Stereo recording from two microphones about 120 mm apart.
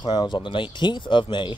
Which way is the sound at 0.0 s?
40° left (ahead or behind).